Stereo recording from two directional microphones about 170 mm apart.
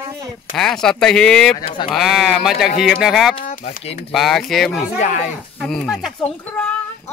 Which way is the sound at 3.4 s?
55° left (ahead or behind).